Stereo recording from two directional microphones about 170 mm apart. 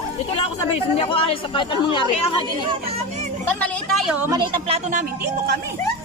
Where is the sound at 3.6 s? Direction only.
5° left (ahead or behind).